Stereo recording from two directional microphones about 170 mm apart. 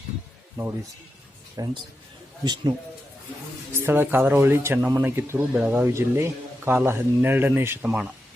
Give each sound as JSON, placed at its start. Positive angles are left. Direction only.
{"t": 0.6, "sound": "a man's voice", "side_deg": -20}
{"t": 3.8, "sound": "speech", "side_deg": -15}